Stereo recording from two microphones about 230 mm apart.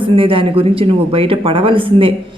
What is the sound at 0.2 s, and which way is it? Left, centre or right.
Speech, right.